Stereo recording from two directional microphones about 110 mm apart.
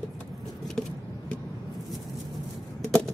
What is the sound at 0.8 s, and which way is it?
Vehicle, 5° left (ahead or behind).